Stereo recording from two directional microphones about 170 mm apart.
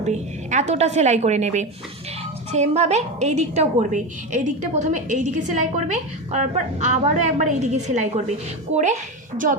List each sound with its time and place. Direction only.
0.0 s a woman's voice: 45° right (ahead or behind)